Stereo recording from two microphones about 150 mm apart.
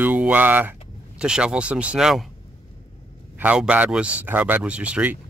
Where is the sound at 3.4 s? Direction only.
10° right (ahead or behind).